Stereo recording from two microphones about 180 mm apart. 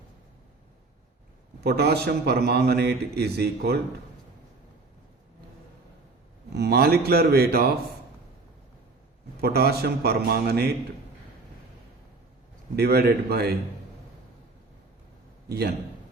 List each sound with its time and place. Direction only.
1.6 s a man's voice: 65° right (ahead or behind)
6.5 s a man's voice: 65° right (ahead or behind)
9.4 s a man's voice: 60° right (ahead or behind)
12.7 s a man's voice: 65° right (ahead or behind)
15.4 s a man's voice: 65° right (ahead or behind)